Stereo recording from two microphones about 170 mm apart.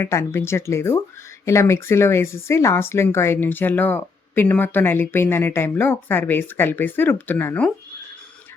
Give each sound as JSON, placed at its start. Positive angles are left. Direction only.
{"t": 0.0, "sound": "speech", "side_deg": 15}